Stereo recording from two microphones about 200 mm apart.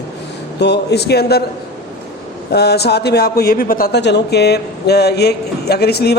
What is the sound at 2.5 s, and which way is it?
A man's voice, 55° left (ahead or behind).